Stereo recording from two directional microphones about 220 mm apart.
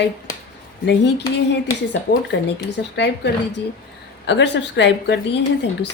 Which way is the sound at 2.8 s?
50° left (ahead or behind).